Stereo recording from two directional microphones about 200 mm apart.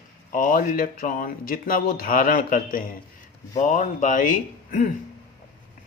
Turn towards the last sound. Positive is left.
turn(degrees=40)  # may be behind; listen again after turning